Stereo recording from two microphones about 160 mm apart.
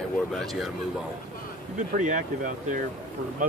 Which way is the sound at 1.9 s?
50° right (ahead or behind).